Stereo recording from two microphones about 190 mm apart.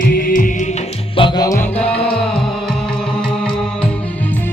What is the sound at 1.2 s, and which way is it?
Music, 25° left (ahead or behind).